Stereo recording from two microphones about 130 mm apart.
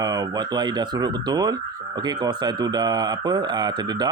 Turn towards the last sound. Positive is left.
turn(degrees=-35)  # may be behind; listen again after turning